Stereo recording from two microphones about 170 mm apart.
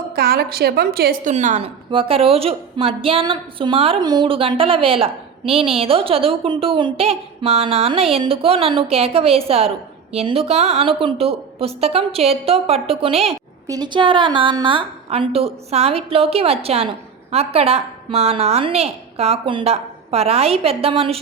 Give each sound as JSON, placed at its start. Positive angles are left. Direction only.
{"t": 0.2, "sound": "a woman's voice", "side_deg": -65}
{"t": 1.9, "sound": "a woman's voice", "side_deg": -35}
{"t": 13.7, "sound": "a woman's voice", "side_deg": -25}